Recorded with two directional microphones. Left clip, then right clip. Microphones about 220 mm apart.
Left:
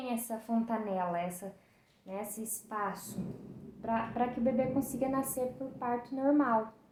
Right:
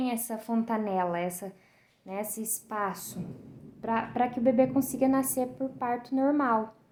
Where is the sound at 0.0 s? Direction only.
40° right (ahead or behind).